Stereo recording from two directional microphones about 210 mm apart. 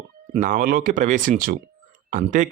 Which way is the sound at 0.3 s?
40° right (ahead or behind).